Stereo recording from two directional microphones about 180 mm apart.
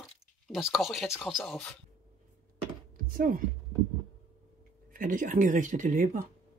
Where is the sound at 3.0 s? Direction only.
50° right (ahead or behind).